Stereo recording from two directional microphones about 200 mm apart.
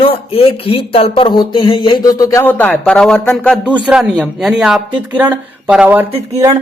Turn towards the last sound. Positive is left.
turn(degrees=-15)  # may be behind; listen again after turning